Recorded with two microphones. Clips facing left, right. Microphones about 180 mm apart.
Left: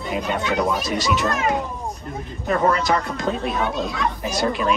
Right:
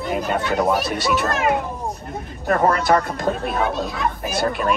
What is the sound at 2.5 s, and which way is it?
Speech, 50° right (ahead or behind).